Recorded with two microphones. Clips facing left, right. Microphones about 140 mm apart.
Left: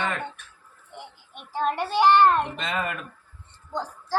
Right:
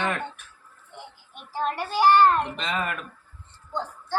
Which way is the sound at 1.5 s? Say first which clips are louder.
Left 2 dB; 25° left (ahead or behind).